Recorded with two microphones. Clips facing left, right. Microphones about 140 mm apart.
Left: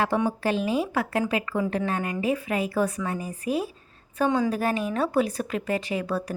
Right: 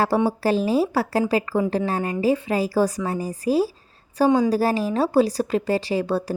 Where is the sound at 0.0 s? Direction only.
35° right (ahead or behind).